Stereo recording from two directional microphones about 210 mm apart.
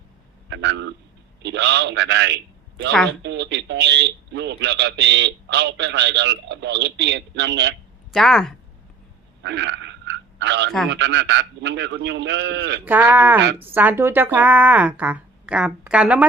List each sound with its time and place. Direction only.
0.5 s a man's voice: 55° right (ahead or behind)
8.1 s speech: centre (ahead or behind)
9.4 s a sound: 55° right (ahead or behind)
10.8 s speech: 55° right (ahead or behind)
12.8 s speech: 10° right (ahead or behind)